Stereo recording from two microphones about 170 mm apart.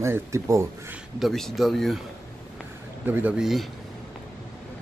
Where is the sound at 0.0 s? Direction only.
15° right (ahead or behind).